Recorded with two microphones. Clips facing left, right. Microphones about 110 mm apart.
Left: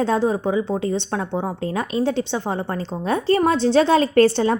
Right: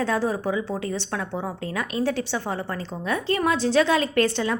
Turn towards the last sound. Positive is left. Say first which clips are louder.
# left 7 dB
turn(degrees=35)  # may be behind; listen again after turning